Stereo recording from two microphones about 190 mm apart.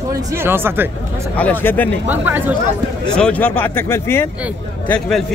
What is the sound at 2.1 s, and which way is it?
Speech, 10° right (ahead or behind).